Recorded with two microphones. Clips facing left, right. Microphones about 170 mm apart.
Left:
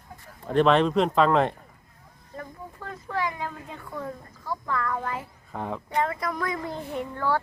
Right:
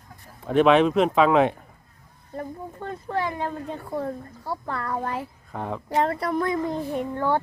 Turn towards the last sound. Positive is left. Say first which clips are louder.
# right 3 dB
turn(degrees=-20)  # may be behind; listen again after turning